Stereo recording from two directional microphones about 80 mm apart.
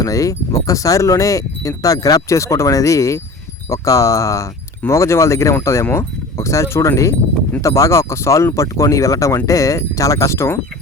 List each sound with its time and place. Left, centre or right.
0.0 s speech: left